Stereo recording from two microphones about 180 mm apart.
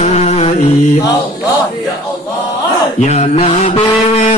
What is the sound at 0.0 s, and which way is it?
Music, 35° left (ahead or behind).